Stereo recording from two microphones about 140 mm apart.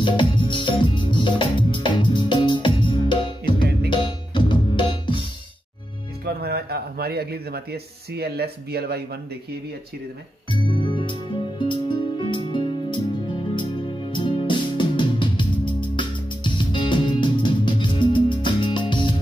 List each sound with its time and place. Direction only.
0.0 s music: 35° left (ahead or behind)
7.0 s a sound: 90° right
10.5 s music: 35° left (ahead or behind)